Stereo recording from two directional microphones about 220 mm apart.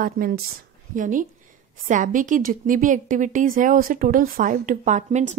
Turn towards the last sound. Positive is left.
turn(degrees=-35)  # may be behind; listen again after turning